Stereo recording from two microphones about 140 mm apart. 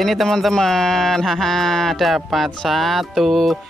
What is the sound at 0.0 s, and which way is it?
Speech, centre (ahead or behind).